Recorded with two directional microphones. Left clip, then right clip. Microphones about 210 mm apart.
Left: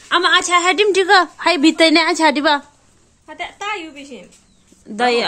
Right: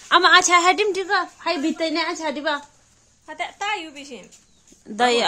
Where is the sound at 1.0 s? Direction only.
25° left (ahead or behind).